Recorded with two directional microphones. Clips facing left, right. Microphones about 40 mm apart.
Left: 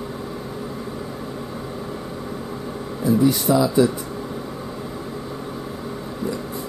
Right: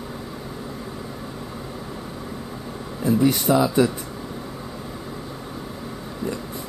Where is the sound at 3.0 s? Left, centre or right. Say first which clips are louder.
Left 1 dB; right.